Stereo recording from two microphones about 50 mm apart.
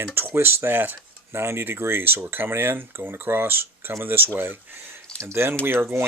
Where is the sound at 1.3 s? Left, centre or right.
Right.